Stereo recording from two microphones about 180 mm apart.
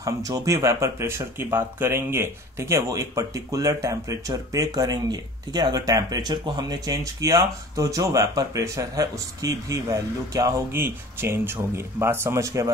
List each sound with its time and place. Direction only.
0.0 s speech: 20° right (ahead or behind)